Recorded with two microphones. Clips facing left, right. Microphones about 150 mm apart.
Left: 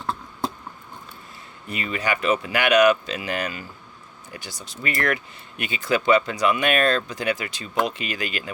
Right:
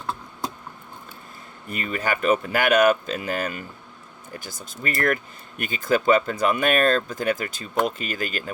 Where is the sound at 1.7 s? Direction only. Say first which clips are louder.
Even; 45° right (ahead or behind).